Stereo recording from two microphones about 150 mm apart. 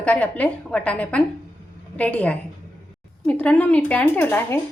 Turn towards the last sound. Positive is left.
turn(degrees=15)  # may be behind; listen again after turning